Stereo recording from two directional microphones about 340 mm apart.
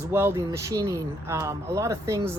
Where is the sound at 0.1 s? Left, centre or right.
Centre.